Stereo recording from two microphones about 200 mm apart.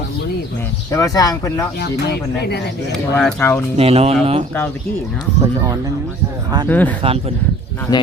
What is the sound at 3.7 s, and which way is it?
Speech, 30° right (ahead or behind).